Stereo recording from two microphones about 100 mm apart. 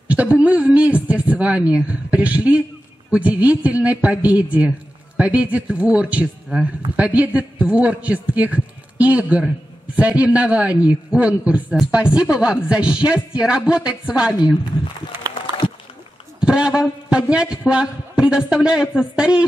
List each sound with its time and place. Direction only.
0.1 s a woman's voice: 10° right (ahead or behind)
16.3 s a man's voice: 10° right (ahead or behind)